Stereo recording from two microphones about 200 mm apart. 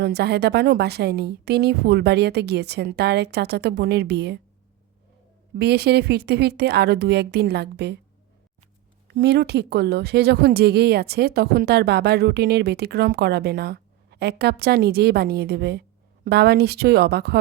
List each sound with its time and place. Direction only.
0.0 s speech: 55° right (ahead or behind)
5.5 s speech: 55° right (ahead or behind)
9.1 s speech: 55° right (ahead or behind)